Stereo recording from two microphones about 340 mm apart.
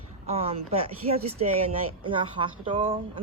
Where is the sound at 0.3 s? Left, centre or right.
Centre.